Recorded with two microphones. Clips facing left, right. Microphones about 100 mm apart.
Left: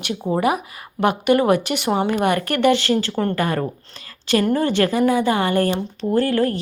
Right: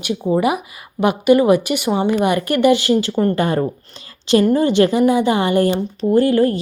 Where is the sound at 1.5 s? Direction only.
10° right (ahead or behind).